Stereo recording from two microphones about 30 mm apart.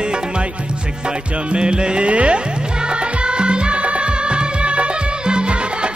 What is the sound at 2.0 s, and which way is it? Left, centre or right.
Music, right.